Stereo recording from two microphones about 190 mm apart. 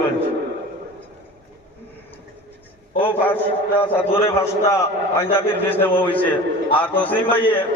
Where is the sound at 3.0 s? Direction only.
10° left (ahead or behind).